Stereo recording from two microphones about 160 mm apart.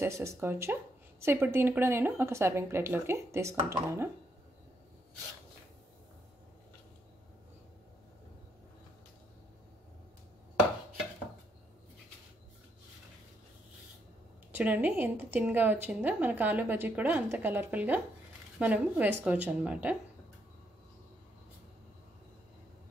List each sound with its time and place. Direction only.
0.0 s a woman's voice: 15° right (ahead or behind)
14.5 s a woman's voice: 10° right (ahead or behind)